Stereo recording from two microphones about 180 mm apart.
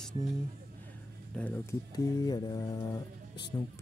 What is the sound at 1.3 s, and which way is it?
Speech, 10° left (ahead or behind).